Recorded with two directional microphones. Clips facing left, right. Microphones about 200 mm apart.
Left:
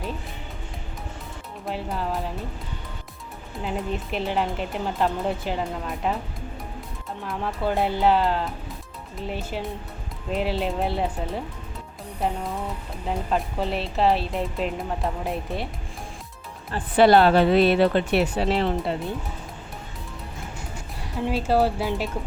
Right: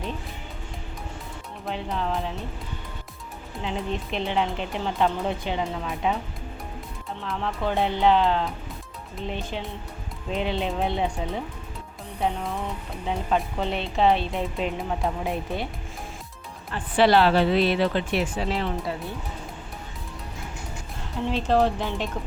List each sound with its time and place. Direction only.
1.6 s speech: 5° left (ahead or behind)
3.6 s a woman's voice: 5° left (ahead or behind)
7.2 s a woman's voice: 10° left (ahead or behind)
17.0 s speech: 50° left (ahead or behind); by 18.5 s 65° left (ahead or behind)
18.5 s speech: 30° left (ahead or behind)
21.2 s speech: 10° left (ahead or behind)